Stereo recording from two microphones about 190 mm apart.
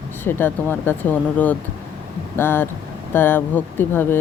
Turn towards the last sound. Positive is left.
turn(degrees=10)  # may be behind; listen again after turning